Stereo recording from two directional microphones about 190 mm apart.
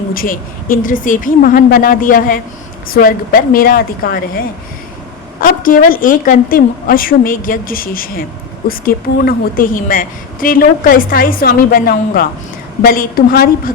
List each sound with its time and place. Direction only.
0.1 s a woman's voice: 50° left (ahead or behind)